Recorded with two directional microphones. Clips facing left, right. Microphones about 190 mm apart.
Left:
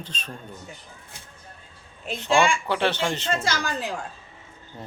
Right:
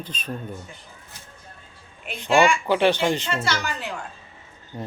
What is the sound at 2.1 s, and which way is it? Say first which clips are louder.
Speech: right 2 dB; 10° right (ahead or behind).